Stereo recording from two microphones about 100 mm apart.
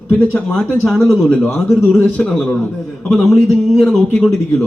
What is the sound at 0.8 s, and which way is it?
A man's voice, centre (ahead or behind).